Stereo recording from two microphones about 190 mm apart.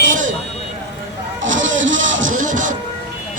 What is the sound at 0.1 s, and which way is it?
Vehicle, 40° right (ahead or behind).